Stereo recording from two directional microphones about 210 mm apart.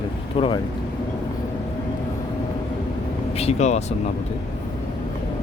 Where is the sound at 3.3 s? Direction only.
30° left (ahead or behind).